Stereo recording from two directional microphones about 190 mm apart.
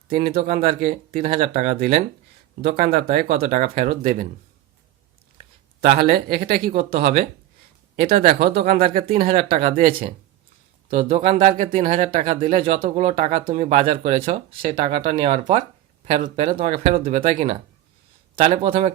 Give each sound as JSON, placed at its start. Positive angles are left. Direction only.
{"t": 0.1, "sound": "speech", "side_deg": -50}
{"t": 2.6, "sound": "speech", "side_deg": -55}
{"t": 5.8, "sound": "speech", "side_deg": -45}
{"t": 7.9, "sound": "speech", "side_deg": -55}
{"t": 16.5, "sound": "speech", "side_deg": -40}